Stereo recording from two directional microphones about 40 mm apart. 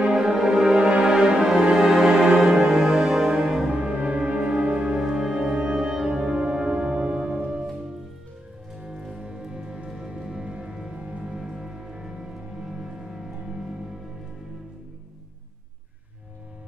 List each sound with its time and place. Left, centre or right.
0.0 s music: centre
3.6 s music: right
5.0 s music: centre
8.7 s music: right
11.0 s music: right
11.3 s music: centre